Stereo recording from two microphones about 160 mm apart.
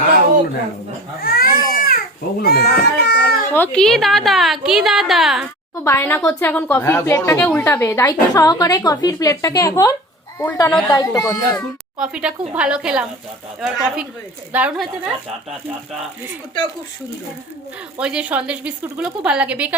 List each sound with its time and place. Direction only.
1.2 s baby cry: 65° left (ahead or behind)
2.4 s cat: 75° left (ahead or behind)
3.5 s a woman's voice: 10° left (ahead or behind)
5.8 s a woman's voice: 15° left (ahead or behind)
11.9 s a woman's voice: 5° right (ahead or behind)
17.9 s a woman's voice: 5° right (ahead or behind)